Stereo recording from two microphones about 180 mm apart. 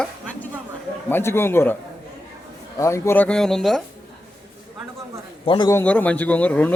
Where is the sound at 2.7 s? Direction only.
15° left (ahead or behind).